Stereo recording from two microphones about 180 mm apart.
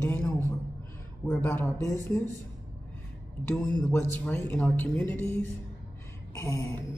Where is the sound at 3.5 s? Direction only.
10° left (ahead or behind).